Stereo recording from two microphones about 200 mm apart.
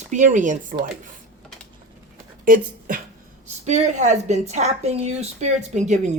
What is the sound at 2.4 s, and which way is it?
Speech, 45° right (ahead or behind).